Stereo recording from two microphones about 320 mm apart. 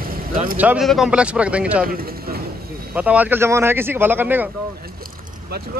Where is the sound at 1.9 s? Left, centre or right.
Right.